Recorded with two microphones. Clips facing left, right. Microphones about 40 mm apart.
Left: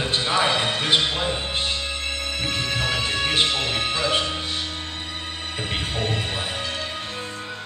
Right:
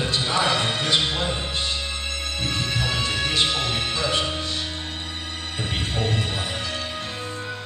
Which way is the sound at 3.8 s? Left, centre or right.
Centre.